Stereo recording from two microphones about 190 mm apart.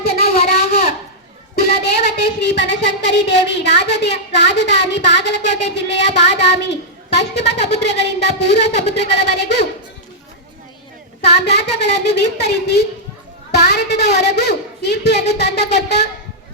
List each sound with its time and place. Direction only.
0.0 s a sound: 55° left (ahead or behind)
1.5 s child singing: 60° left (ahead or behind)
7.2 s a woman's voice: 65° left (ahead or behind)
11.2 s speech: 60° left (ahead or behind)